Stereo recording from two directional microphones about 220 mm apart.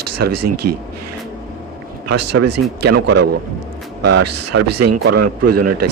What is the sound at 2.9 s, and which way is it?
Speech, 90° right.